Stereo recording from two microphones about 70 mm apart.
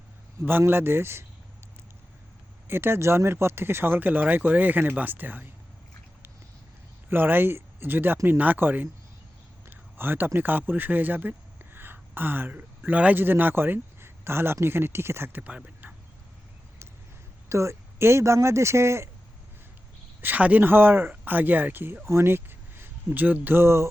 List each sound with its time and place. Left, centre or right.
0.6 s speech: right
2.6 s speech: right
7.1 s speech: right
17.5 s speech: right
20.2 s speech: right